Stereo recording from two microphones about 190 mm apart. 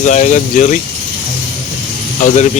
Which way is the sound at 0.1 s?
40° left (ahead or behind).